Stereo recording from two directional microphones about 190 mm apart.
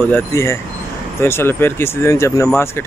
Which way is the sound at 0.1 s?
15° left (ahead or behind).